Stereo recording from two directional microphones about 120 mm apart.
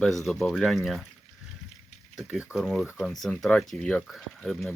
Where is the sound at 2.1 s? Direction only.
5° right (ahead or behind).